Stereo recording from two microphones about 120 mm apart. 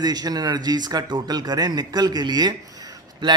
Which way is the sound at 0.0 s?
35° right (ahead or behind).